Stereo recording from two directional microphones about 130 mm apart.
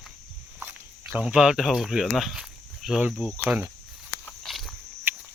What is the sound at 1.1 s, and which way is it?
Speech, 5° right (ahead or behind).